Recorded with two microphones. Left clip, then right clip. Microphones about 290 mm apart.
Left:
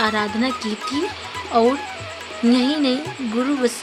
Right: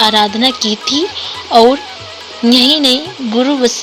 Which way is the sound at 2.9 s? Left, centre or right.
Centre.